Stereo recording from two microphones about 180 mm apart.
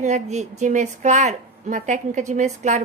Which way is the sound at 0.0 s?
40° right (ahead or behind).